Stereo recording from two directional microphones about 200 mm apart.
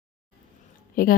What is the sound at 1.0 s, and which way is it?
Speech, 45° left (ahead or behind).